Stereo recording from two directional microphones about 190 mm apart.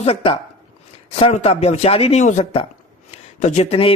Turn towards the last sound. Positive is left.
turn(degrees=30)  # may be behind; listen again after turning